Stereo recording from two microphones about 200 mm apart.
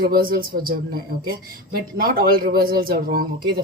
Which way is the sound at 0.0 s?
45° right (ahead or behind).